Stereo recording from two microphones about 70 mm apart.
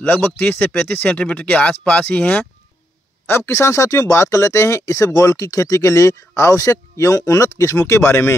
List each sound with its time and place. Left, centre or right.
0.0 s speech: left
3.3 s speech: left